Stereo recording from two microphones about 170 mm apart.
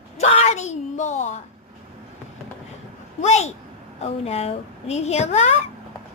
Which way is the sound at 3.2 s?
40° left (ahead or behind).